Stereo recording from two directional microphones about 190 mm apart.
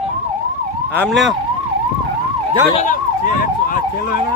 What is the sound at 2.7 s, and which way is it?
Emergency vehicle, 45° left (ahead or behind).